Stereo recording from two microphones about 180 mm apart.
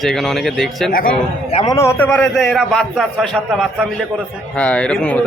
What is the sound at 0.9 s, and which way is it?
Speech, 50° left (ahead or behind).